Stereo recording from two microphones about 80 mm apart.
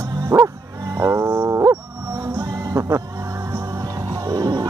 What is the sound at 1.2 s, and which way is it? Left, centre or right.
Music, right.